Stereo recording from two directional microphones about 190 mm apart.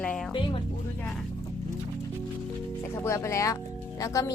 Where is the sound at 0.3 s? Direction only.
25° left (ahead or behind).